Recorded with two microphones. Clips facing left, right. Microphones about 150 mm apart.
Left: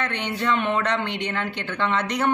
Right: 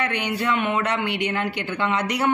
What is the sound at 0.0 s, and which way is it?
A woman's voice, 10° right (ahead or behind).